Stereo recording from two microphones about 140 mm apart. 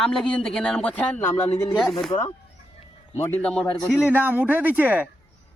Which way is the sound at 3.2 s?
15° left (ahead or behind).